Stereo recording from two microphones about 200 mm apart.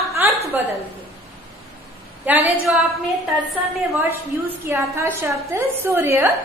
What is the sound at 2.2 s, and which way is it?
Speech, 10° right (ahead or behind).